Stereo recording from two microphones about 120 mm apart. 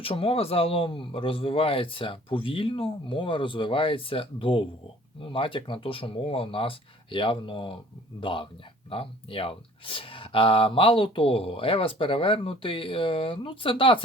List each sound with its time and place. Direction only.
0.0 s speech: 50° left (ahead or behind)